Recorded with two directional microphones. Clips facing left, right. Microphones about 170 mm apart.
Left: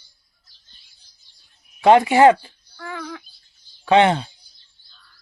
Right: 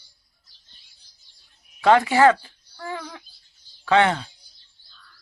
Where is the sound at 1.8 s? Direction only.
20° left (ahead or behind).